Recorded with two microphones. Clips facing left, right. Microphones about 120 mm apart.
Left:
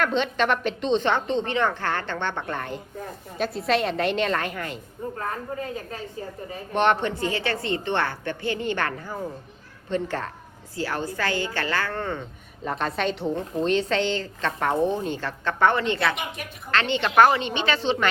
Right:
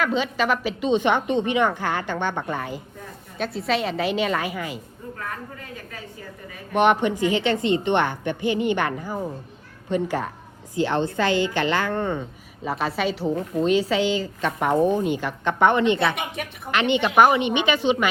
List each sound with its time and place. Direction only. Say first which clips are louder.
0.0 s a woman's voice: even; 5° right (ahead or behind)
5.1 s a woman's voice: left 3 dB; 30° left (ahead or behind)
6.7 s a woman's voice: right 3 dB; 10° right (ahead or behind)
10.8 s a woman's voice: right 6 dB; 25° right (ahead or behind)
12.6 s a woman's voice: right 1 dB; 5° right (ahead or behind)